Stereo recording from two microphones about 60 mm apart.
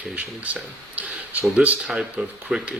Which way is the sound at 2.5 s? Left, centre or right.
Centre.